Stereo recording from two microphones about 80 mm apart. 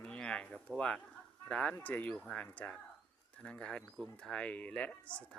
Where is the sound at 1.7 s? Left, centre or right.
Left.